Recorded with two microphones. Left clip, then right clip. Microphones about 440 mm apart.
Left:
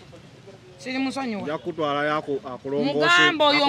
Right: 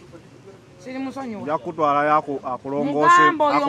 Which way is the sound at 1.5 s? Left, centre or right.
Centre.